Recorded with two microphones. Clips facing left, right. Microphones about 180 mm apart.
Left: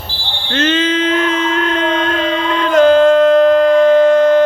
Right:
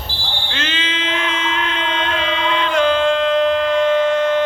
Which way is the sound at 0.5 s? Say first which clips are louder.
Left 13 dB; 40° left (ahead or behind).